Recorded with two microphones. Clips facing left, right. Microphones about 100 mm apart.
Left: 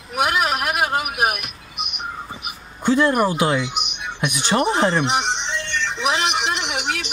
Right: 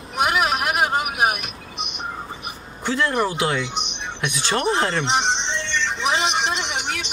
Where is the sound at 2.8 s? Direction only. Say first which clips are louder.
Left 4 dB; 20° left (ahead or behind).